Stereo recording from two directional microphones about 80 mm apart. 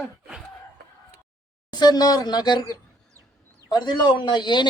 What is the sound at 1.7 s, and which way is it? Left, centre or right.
Speech, left.